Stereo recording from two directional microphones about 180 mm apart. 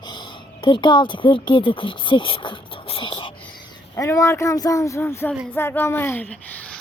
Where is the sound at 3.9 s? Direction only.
15° left (ahead or behind).